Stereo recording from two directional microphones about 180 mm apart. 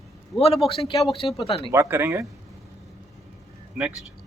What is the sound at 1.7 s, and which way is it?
Speech, 15° right (ahead or behind).